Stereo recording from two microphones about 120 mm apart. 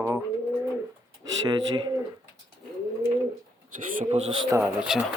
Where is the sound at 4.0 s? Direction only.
70° right (ahead or behind).